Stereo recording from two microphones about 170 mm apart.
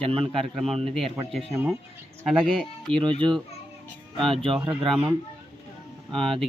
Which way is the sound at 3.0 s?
30° right (ahead or behind).